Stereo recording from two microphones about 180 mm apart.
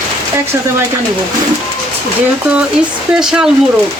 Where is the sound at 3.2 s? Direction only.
5° right (ahead or behind).